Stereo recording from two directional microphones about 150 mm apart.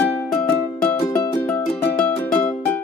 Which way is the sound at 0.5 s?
15° left (ahead or behind).